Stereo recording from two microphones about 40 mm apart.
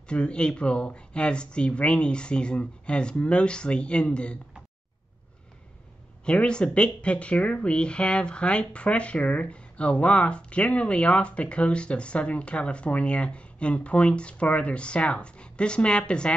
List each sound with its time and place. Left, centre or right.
0.1 s speech: left
6.2 s speech: left